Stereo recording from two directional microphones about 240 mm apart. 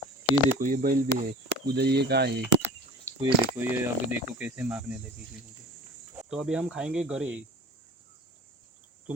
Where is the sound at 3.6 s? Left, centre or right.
Centre.